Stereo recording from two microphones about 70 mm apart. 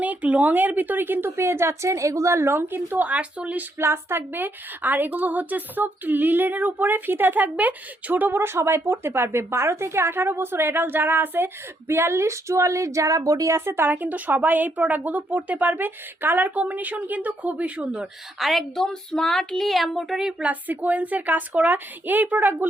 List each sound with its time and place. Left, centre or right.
0.0 s a woman's voice: right
1.5 s a woman's voice: right; by 3.7 s centre
3.8 s a woman's voice: right
13.7 s a woman's voice: right; by 18.1 s centre
18.3 s a woman's voice: centre
20.5 s a woman's voice: right